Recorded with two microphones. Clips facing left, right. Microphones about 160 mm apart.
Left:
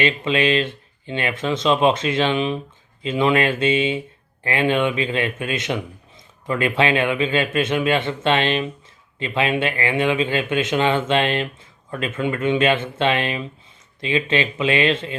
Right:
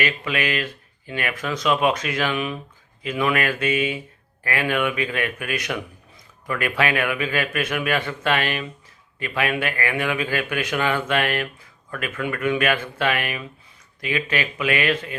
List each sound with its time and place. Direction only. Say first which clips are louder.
0.0 s speech: left 5 dB; 25° left (ahead or behind)